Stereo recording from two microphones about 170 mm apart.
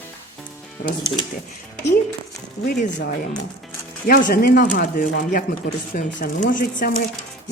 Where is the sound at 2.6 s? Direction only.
55° left (ahead or behind).